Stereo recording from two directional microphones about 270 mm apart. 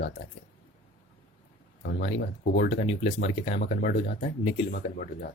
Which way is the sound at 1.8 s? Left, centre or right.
Left.